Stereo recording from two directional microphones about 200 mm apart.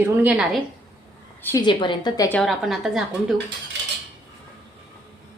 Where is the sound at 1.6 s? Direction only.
25° left (ahead or behind).